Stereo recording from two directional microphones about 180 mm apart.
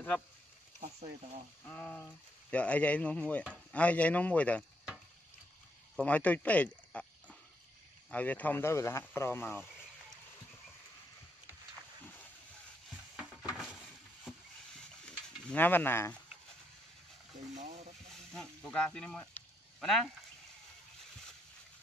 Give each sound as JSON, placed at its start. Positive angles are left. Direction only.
{"t": 1.6, "sound": "speech", "side_deg": 10}
{"t": 5.9, "sound": "speech", "side_deg": 10}
{"t": 15.0, "sound": "a sound", "side_deg": 10}
{"t": 17.6, "sound": "frying", "side_deg": -40}
{"t": 18.1, "sound": "speech", "side_deg": 5}